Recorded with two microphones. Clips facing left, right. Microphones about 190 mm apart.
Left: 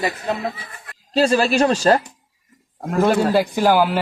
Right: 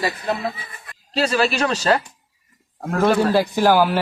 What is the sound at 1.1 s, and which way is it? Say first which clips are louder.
Speech: left 4 dB; 45° left (ahead or behind).